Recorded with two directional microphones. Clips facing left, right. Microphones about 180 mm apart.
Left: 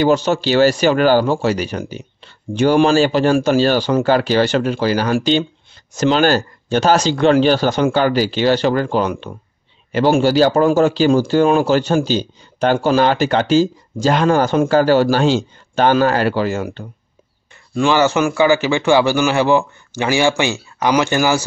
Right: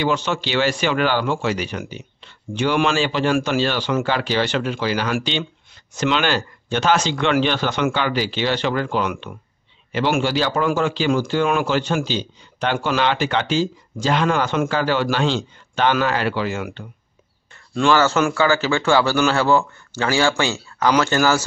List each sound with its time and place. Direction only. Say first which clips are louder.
0.0 s speech: left 7 dB; 40° left (ahead or behind)
17.7 s a man's voice: left 2 dB; 15° left (ahead or behind)